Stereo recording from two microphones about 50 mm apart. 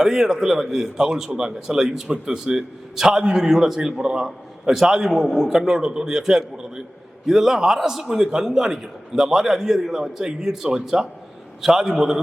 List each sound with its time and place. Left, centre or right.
0.0 s a man's voice: centre